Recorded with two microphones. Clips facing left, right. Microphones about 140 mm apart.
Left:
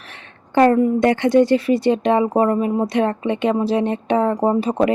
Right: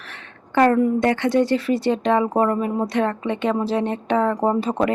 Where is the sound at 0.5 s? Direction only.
20° left (ahead or behind).